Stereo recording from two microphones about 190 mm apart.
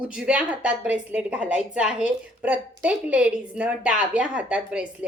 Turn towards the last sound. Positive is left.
turn(degrees=-5)  # may be behind; listen again after turning